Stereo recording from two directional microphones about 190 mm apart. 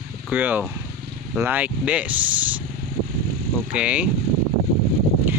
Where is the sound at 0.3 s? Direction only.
10° right (ahead or behind).